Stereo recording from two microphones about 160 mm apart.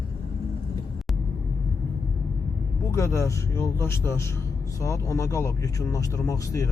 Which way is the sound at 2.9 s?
20° left (ahead or behind).